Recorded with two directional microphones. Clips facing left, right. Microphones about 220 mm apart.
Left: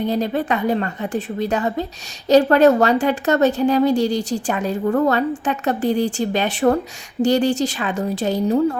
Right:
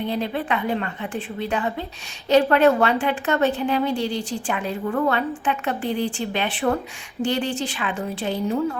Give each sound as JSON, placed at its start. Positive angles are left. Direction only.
{"t": 0.0, "sound": "a woman's voice", "side_deg": 40}